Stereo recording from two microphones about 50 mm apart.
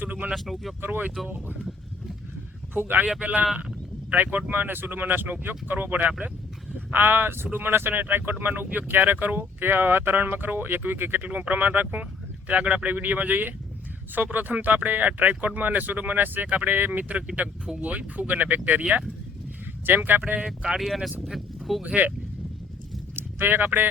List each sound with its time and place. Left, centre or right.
0.3 s speech: centre
0.8 s speech: right
2.7 s speech: right
20.4 s speech: centre
20.7 s speech: centre
22.0 s speech: right
23.1 s speech: right